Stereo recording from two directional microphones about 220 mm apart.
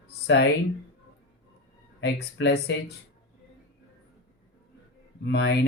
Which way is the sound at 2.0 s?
50° left (ahead or behind).